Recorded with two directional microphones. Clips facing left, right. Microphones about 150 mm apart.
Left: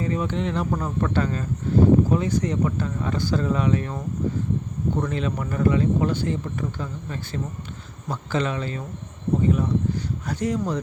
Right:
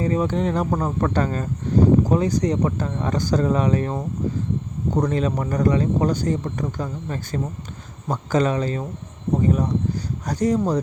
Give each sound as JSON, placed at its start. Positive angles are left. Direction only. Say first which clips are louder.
{"t": 0.0, "sound": "speech", "louder": "right 4 dB", "side_deg": -35}